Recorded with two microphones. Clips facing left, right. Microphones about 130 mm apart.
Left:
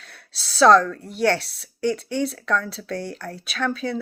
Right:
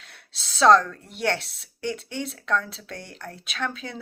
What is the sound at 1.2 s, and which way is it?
Speech, 20° right (ahead or behind).